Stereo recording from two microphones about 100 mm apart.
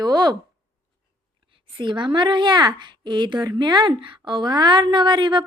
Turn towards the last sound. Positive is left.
turn(degrees=-50)  # may be behind; listen again after turning